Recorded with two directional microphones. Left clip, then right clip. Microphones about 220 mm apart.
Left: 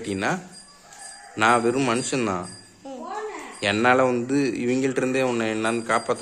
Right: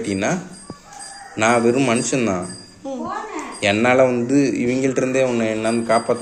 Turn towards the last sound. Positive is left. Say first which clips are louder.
# right 5 dB
turn(degrees=25)  # may be behind; listen again after turning